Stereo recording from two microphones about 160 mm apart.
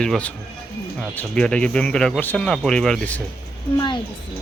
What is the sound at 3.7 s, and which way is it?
Speech, 30° left (ahead or behind).